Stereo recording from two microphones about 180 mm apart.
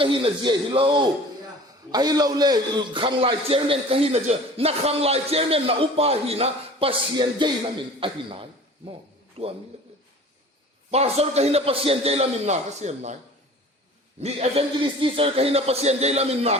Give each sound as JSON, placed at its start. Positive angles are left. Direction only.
{"t": 0.0, "sound": "a man's voice", "side_deg": -30}
{"t": 10.9, "sound": "a man's voice", "side_deg": -35}
{"t": 14.2, "sound": "a man's voice", "side_deg": -35}